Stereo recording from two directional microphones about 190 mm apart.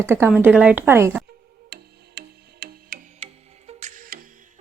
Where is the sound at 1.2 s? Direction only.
55° right (ahead or behind).